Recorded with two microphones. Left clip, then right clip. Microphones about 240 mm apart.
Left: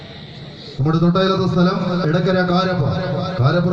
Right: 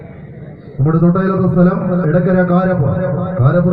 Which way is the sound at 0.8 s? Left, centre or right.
Left.